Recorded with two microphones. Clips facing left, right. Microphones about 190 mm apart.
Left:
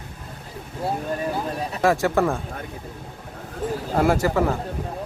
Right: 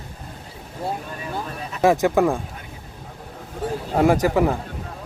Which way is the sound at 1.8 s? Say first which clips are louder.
Right 3 dB; 15° right (ahead or behind).